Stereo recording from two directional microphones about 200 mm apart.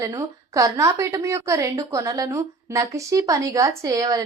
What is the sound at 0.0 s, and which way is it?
A woman's voice, 15° right (ahead or behind).